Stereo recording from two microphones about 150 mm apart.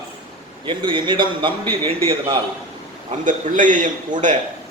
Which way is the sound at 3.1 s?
60° right (ahead or behind).